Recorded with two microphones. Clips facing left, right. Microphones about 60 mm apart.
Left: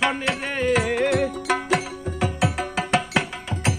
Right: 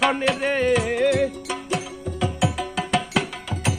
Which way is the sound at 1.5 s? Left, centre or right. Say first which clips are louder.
Left 5 dB; left.